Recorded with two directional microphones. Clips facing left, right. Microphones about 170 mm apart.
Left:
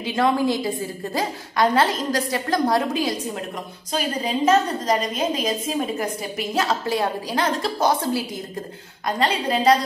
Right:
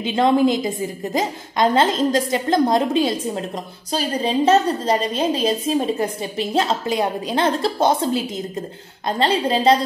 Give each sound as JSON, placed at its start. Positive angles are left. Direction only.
{"t": 0.0, "sound": "a woman's voice", "side_deg": -25}